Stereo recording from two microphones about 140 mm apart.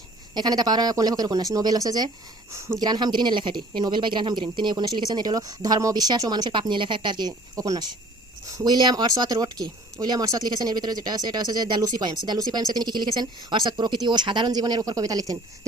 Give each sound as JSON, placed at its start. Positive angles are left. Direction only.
{"t": 0.3, "sound": "speech", "side_deg": -30}